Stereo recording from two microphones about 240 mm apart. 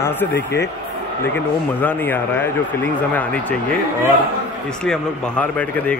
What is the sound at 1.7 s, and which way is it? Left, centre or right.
Speech, centre.